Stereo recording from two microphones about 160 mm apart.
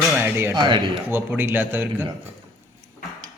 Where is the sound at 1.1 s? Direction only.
10° right (ahead or behind).